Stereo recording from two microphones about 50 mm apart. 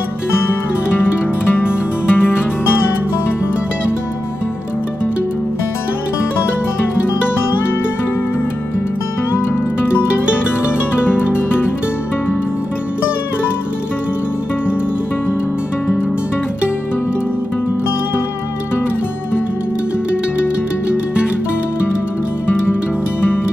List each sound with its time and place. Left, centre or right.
1.5 s music: left